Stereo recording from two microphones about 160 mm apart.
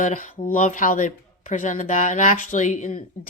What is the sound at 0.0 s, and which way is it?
Speech, 55° left (ahead or behind).